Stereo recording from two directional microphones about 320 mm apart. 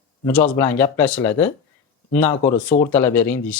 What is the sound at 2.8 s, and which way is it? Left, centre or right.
Speech, centre.